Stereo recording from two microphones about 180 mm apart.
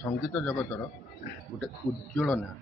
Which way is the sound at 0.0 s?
10° left (ahead or behind).